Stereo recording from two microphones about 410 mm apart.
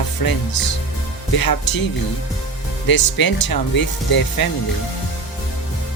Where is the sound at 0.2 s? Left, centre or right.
Left.